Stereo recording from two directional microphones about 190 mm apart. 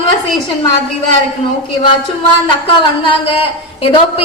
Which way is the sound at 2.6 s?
30° left (ahead or behind).